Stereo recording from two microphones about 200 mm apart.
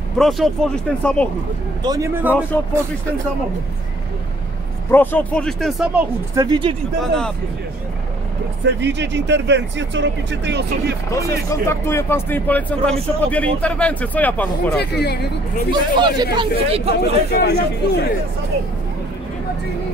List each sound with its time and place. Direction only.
0.2 s speech: centre (ahead or behind)
1.8 s a man's voice: 15° right (ahead or behind)
4.9 s speech: 10° left (ahead or behind)
6.3 s speech: 20° right (ahead or behind)
7.0 s speech: 5° left (ahead or behind)
8.7 s speech: 60° right (ahead or behind)
11.1 s speech: 15° left (ahead or behind)
14.8 s speech: 55° left (ahead or behind)
15.7 s speech: 20° right (ahead or behind)
17.3 s speech: 55° left (ahead or behind)